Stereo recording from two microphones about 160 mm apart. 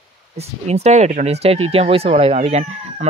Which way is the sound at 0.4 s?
40° right (ahead or behind).